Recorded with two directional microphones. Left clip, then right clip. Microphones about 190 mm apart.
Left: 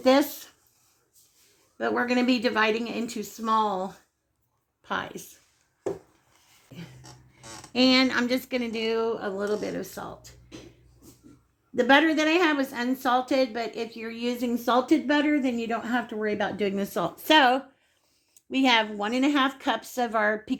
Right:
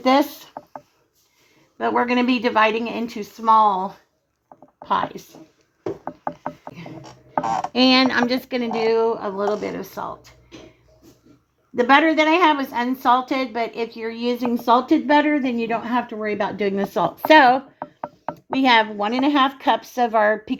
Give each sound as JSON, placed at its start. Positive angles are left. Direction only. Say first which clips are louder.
{"t": 0.0, "sound": "a sound", "louder": "right 4 dB", "side_deg": -45}
{"t": 1.8, "sound": "a woman's voice", "louder": "right 6 dB", "side_deg": -40}
{"t": 7.7, "sound": "a woman's voice", "louder": "right 4 dB", "side_deg": -45}
{"t": 11.7, "sound": "a woman's voice", "louder": "right 5 dB", "side_deg": -40}